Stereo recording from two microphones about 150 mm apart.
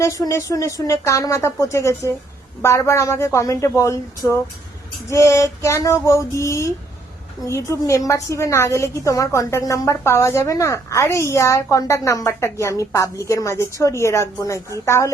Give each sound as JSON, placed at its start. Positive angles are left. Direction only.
{"t": 0.0, "sound": "a woman's voice", "side_deg": 20}